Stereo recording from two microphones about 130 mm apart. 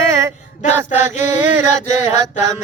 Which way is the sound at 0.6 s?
60° left (ahead or behind).